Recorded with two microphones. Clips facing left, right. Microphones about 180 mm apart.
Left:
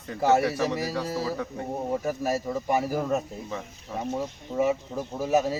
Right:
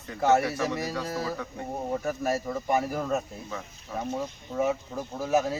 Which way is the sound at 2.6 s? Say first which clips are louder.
Left 1 dB; 10° left (ahead or behind).